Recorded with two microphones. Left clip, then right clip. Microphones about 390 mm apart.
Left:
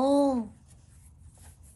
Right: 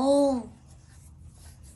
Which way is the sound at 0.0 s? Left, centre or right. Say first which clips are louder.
Right 2 dB; left.